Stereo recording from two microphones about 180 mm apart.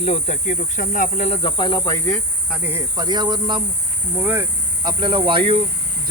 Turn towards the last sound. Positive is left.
turn(degrees=-30)  # may be behind; listen again after turning